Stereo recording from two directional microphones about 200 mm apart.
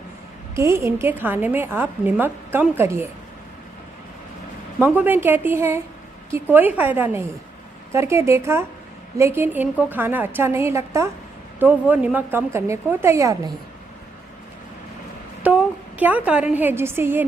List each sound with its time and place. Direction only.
0.5 s a woman's voice: 15° right (ahead or behind)
4.8 s a woman's voice: 10° right (ahead or behind)
15.4 s a woman's voice: 5° right (ahead or behind)